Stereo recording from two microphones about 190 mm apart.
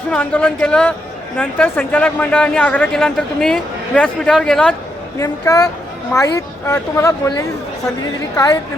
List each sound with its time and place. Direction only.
0.1 s speech: 5° left (ahead or behind)
5.1 s speech: 15° left (ahead or behind)